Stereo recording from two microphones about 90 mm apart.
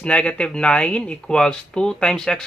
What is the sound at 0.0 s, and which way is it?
Speech, 10° left (ahead or behind).